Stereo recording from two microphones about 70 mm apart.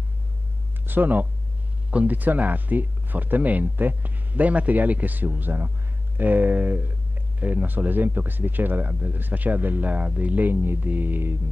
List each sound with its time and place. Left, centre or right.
0.8 s speech: right